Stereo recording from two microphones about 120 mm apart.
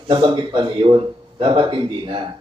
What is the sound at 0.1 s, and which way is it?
Speech, 40° right (ahead or behind).